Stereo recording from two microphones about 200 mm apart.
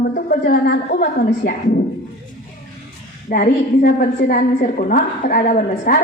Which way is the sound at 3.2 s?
45° left (ahead or behind).